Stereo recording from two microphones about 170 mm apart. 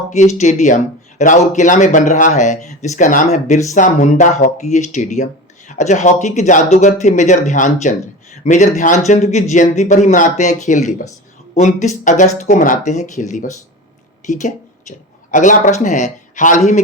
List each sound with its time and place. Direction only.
0.1 s speech: 40° left (ahead or behind)